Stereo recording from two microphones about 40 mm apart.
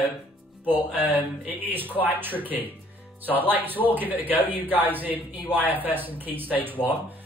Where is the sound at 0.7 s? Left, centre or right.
Right.